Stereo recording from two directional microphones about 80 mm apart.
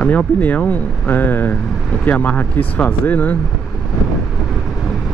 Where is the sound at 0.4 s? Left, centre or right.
Centre.